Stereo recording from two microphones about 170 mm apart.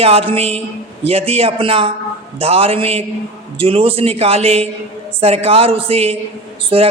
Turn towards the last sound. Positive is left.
turn(degrees=-35)  # may be behind; listen again after turning